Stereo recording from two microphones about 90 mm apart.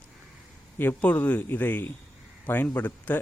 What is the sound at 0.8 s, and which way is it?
A man's voice, 20° left (ahead or behind).